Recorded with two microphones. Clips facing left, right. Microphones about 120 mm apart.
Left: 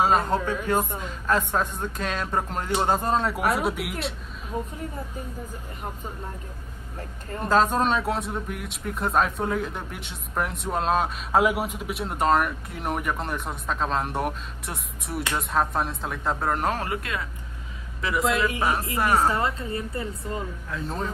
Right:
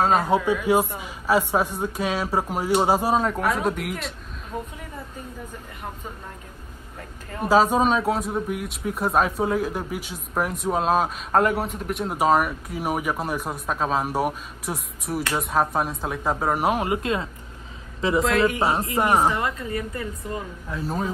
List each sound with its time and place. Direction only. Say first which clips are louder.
0.0 s speech: right 1 dB; centre (ahead or behind)
0.9 s speech: right 3 dB; 10° right (ahead or behind)
3.5 s speech: right 1 dB; centre (ahead or behind)
7.3 s speech: right 3 dB; 5° right (ahead or behind)
17.0 s speech: right 6 dB; 30° right (ahead or behind)
19.3 s a woman's voice: even; 30° left (ahead or behind)
20.7 s speech: right 4 dB; 5° right (ahead or behind)